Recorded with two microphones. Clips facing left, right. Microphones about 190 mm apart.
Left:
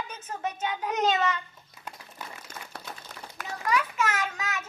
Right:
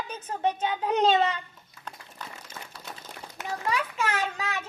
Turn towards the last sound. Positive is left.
turn(degrees=-30)  # may be behind; listen again after turning